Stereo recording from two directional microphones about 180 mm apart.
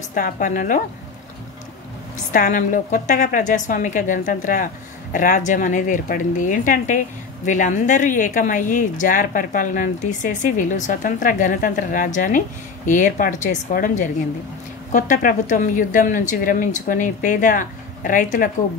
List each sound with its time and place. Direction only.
0.1 s speech: 45° left (ahead or behind)
2.3 s speech: 45° left (ahead or behind)